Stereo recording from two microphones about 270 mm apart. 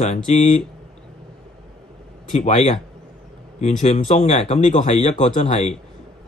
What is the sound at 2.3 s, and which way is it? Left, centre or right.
Speech, left.